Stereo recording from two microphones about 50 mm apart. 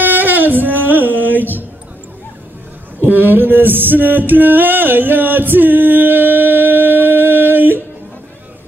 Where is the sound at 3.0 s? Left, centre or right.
Right.